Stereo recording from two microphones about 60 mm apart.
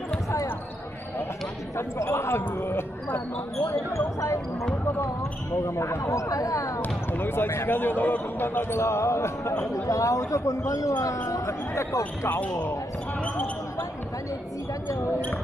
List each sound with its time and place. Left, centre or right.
1.8 s speech: left
3.6 s basketball bounce: left
5.7 s speech: left
6.8 s speech: left
12.3 s speech: left